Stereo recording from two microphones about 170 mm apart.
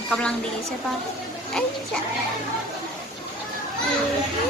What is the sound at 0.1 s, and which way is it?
Speech, 5° left (ahead or behind).